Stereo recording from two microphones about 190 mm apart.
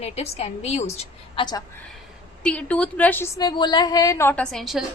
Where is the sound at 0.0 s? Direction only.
35° left (ahead or behind).